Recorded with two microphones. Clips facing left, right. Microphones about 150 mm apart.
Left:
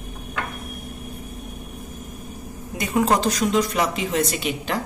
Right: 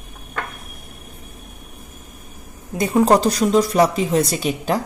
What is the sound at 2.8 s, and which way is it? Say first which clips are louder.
A woman's voice: right 5 dB; 35° right (ahead or behind).